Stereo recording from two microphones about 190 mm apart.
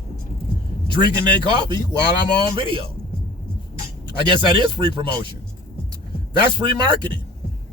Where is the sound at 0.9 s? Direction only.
25° right (ahead or behind).